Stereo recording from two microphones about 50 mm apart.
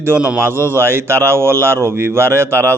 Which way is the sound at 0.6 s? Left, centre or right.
Right.